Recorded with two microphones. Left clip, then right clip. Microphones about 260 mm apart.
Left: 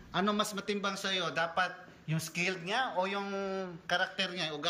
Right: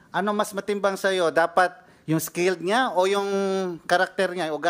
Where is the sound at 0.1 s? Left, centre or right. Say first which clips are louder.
Right 7 dB; centre.